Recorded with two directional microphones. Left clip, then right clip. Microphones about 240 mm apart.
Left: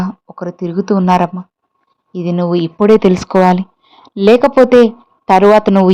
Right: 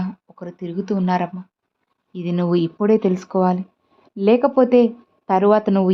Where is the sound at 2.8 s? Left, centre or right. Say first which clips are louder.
Left 12 dB; left.